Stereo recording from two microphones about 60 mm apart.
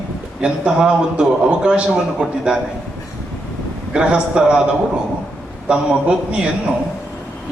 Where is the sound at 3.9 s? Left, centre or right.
Centre.